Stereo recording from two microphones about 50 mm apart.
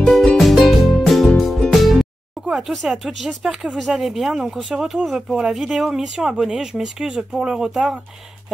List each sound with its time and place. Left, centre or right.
0.0 s music: centre
0.4 s music: centre
2.5 s speech: centre
5.5 s speech: centre